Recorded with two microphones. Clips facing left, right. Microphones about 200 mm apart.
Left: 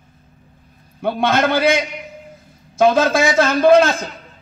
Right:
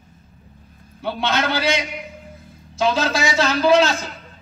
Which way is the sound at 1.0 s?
55° left (ahead or behind).